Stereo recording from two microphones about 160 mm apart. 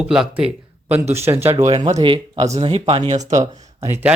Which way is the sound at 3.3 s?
15° right (ahead or behind).